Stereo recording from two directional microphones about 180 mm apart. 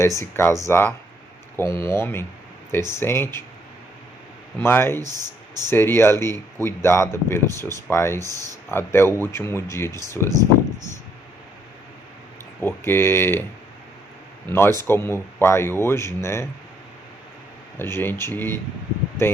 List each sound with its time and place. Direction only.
0.0 s speech: 15° left (ahead or behind)
4.6 s speech: 15° left (ahead or behind)
12.5 s speech: 10° left (ahead or behind)
14.4 s speech: 15° left (ahead or behind)
17.7 s speech: 15° left (ahead or behind)